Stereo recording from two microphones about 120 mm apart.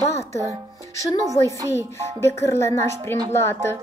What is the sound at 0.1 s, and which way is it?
Music, 25° left (ahead or behind).